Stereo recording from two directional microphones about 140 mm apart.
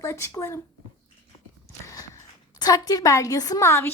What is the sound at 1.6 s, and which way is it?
A woman's voice, 25° left (ahead or behind).